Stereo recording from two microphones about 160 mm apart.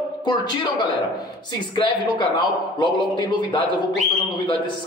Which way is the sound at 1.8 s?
30° left (ahead or behind).